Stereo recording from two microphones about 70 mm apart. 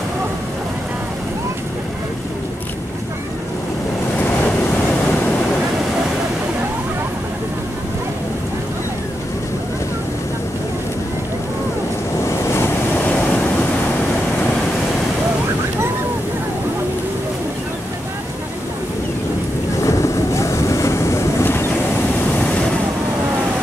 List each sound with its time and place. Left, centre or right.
12.3 s waves: left
19.8 s boat: left